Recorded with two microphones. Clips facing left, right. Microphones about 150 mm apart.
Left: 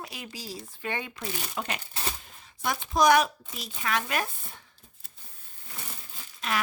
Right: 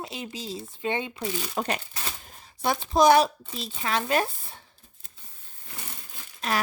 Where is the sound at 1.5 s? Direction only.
40° right (ahead or behind).